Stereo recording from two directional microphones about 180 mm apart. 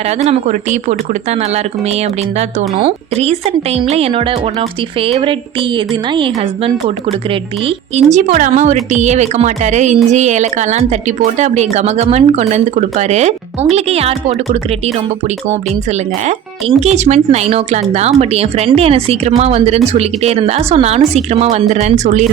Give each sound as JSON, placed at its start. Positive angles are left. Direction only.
{"t": 0.3, "sound": "a woman's voice", "side_deg": -40}
{"t": 7.9, "sound": "a woman's voice", "side_deg": -45}
{"t": 15.9, "sound": "a woman's voice", "side_deg": -40}